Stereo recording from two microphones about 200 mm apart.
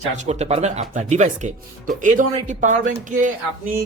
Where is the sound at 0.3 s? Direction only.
30° right (ahead or behind).